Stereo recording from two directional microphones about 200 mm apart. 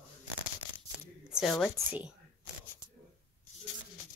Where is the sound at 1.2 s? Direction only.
Centre (ahead or behind).